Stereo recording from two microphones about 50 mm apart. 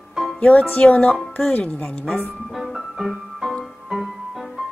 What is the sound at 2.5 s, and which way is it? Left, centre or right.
Music, centre.